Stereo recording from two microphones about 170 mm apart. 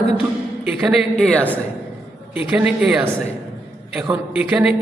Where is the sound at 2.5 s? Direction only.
5° right (ahead or behind).